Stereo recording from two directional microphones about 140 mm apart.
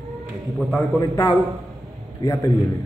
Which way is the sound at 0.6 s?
5° left (ahead or behind).